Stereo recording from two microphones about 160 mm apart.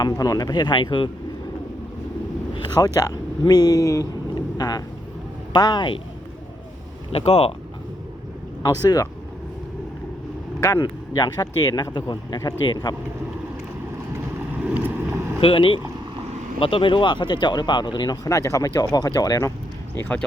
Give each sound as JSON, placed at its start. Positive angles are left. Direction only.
{"t": 0.0, "sound": "speech", "side_deg": 25}
{"t": 2.6, "sound": "speech", "side_deg": 25}
{"t": 7.1, "sound": "speech", "side_deg": 40}
{"t": 8.6, "sound": "speech", "side_deg": 25}
{"t": 10.6, "sound": "speech", "side_deg": 25}
{"t": 14.6, "sound": "vehicle", "side_deg": -10}
{"t": 15.4, "sound": "speech", "side_deg": 35}
{"t": 20.0, "sound": "speech", "side_deg": 10}